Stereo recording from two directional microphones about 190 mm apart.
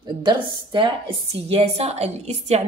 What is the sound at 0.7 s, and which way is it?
A woman's voice, 25° right (ahead or behind).